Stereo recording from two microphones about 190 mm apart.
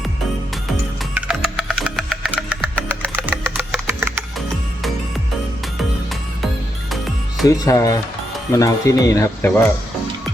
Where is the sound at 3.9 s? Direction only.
10° right (ahead or behind).